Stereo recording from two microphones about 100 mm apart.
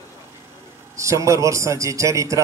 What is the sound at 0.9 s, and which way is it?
A man's voice, 30° right (ahead or behind).